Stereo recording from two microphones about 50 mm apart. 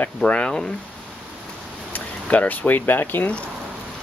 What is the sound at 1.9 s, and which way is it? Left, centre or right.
Speech, left.